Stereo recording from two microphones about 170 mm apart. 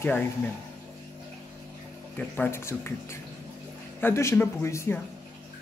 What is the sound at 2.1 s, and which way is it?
Speech, 10° left (ahead or behind).